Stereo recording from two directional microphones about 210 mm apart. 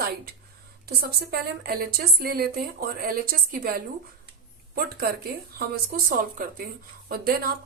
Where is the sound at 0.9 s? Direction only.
50° right (ahead or behind).